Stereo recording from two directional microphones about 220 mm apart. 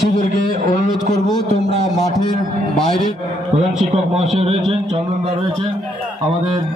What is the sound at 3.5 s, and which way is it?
A man's voice, 30° right (ahead or behind).